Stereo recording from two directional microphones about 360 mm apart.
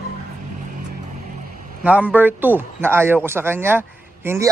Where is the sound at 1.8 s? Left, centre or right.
Centre.